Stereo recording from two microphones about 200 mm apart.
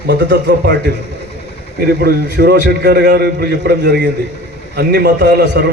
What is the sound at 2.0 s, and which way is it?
A man's voice, 50° right (ahead or behind).